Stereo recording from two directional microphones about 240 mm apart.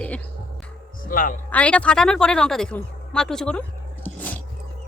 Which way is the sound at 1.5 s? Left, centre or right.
Centre.